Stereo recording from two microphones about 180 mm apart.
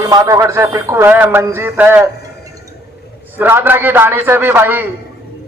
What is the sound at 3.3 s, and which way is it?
A man's voice, 10° right (ahead or behind).